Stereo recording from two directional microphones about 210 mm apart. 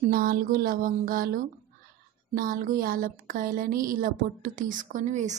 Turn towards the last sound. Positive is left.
turn(degrees=-35)  # may be behind; listen again after turning